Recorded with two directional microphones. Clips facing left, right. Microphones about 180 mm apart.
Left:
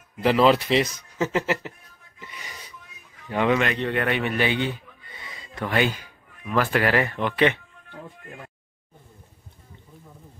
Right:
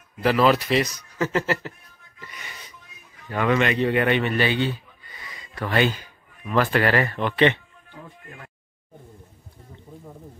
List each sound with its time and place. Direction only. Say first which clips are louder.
0.2 s a man's voice: left 1 dB; 20° left (ahead or behind)
2.1 s music: even; 20° left (ahead or behind)
3.3 s speech: left 1 dB; 15° left (ahead or behind)
3.5 s speech: right 3 dB; 5° right (ahead or behind)
4.2 s a sound: right 1 dB; 15° left (ahead or behind)
5.7 s speech: right 2 dB; 10° left (ahead or behind)